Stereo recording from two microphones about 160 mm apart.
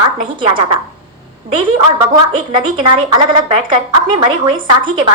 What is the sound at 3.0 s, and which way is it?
A woman's voice, 30° right (ahead or behind).